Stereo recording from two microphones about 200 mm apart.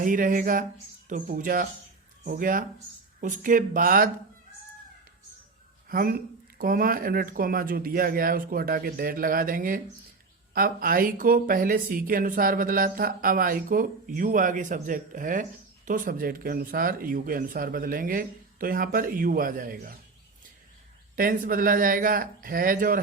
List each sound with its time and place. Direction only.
0.0 s speech: 40° right (ahead or behind)
5.9 s speech: 45° right (ahead or behind)
21.2 s speech: 45° right (ahead or behind)